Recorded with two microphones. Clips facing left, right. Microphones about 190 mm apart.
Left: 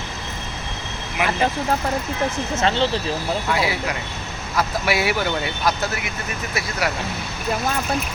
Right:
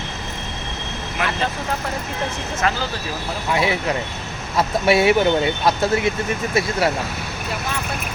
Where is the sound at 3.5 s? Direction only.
25° right (ahead or behind).